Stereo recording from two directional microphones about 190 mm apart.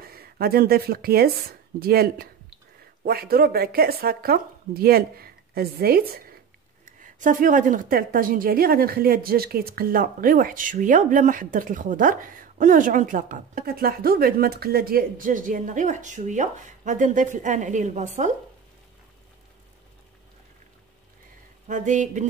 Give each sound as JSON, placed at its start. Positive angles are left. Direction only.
{"t": 0.0, "sound": "speech", "side_deg": -55}
{"t": 7.0, "sound": "a woman's voice", "side_deg": -45}
{"t": 21.6, "sound": "a sound", "side_deg": -40}